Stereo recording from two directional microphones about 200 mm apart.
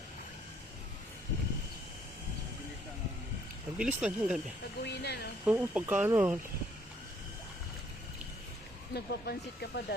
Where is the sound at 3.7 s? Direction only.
5° right (ahead or behind).